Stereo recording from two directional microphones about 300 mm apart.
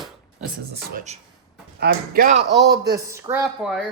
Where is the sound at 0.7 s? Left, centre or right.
Right.